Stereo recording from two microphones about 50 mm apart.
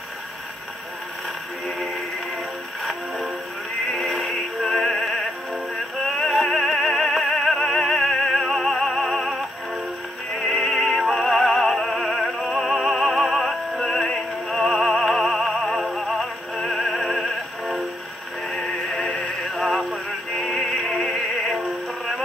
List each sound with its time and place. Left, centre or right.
2.8 s music: centre
10.4 s music: centre
16.6 s opera: centre
17.1 s music: centre
18.6 s music: left
19.5 s music: centre